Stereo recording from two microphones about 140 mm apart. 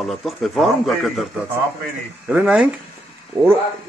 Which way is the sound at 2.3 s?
5° right (ahead or behind).